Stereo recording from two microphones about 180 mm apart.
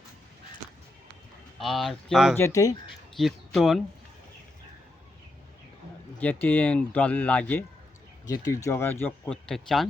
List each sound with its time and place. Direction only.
1.5 s speech: centre (ahead or behind)
2.3 s speech: 15° left (ahead or behind)
3.2 s speech: centre (ahead or behind)
6.1 s speech: 10° left (ahead or behind)
8.3 s speech: 20° left (ahead or behind); by 9.8 s 5° left (ahead or behind)